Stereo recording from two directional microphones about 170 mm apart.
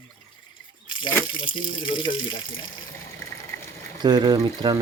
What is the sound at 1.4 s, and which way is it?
Speech, 30° left (ahead or behind).